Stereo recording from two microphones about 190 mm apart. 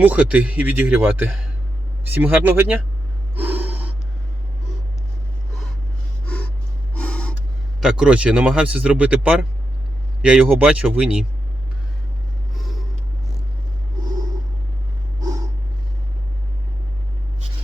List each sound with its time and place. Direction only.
0.0 s speech: 10° right (ahead or behind)
3.3 s gasp: 10° right (ahead or behind)
6.2 s gasp: 5° left (ahead or behind)
7.8 s speech: 5° right (ahead or behind)
15.2 s a sound: 20° right (ahead or behind)